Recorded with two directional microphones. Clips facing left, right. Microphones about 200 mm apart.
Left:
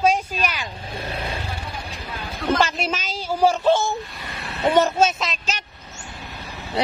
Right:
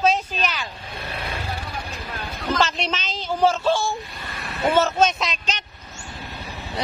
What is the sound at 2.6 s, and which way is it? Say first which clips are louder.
A woman's voice: left 1 dB; 10° left (ahead or behind).